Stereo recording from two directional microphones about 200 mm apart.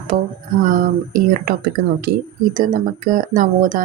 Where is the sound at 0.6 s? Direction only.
40° right (ahead or behind).